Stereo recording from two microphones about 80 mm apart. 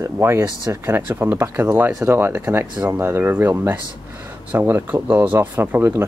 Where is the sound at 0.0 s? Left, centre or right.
Right.